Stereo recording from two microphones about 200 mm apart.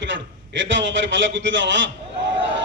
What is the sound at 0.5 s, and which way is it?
A man's voice, 65° right (ahead or behind).